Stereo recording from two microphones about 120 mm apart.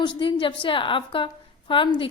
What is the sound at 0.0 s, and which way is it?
A woman's voice, 40° left (ahead or behind).